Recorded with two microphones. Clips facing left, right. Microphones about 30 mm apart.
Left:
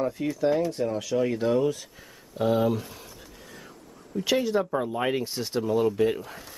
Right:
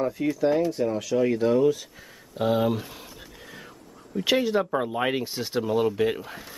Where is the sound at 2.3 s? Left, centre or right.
Centre.